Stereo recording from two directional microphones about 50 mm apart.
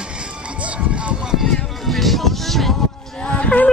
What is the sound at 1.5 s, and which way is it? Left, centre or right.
Music, centre.